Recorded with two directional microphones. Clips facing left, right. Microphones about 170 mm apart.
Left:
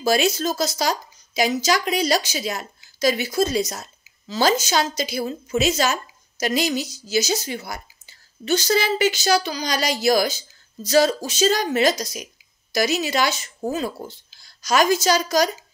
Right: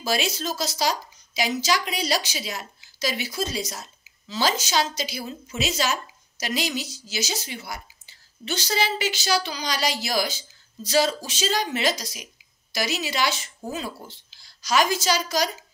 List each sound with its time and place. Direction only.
0.0 s speech: 45° left (ahead or behind)